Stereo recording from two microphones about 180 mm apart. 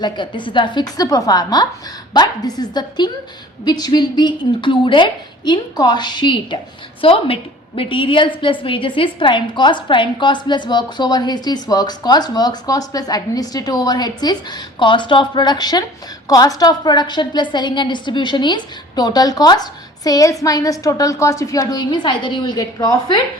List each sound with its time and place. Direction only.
0.0 s a woman's voice: 25° left (ahead or behind)